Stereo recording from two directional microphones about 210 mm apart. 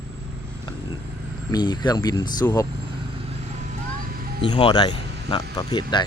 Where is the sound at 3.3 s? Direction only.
35° right (ahead or behind).